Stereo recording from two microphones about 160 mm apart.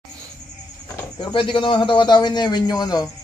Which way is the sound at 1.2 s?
30° left (ahead or behind).